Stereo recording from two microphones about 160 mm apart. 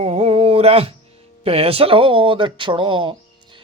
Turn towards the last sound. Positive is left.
turn(degrees=-30)  # may be behind; listen again after turning